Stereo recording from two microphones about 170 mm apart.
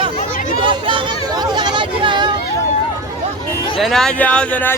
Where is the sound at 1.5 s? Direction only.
25° right (ahead or behind).